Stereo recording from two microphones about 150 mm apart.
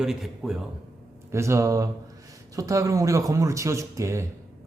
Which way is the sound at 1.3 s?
20° right (ahead or behind).